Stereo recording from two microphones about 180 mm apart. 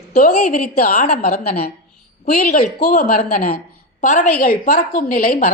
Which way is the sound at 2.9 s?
45° left (ahead or behind).